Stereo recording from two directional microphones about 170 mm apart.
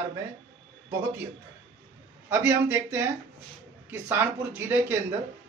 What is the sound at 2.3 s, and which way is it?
A man's voice, 10° right (ahead or behind).